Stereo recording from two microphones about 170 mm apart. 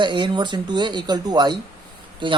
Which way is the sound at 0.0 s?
25° right (ahead or behind).